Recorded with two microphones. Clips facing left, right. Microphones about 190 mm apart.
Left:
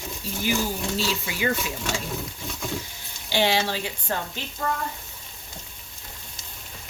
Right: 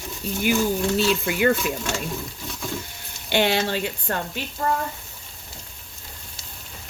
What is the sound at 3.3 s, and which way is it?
Speech, 60° right (ahead or behind).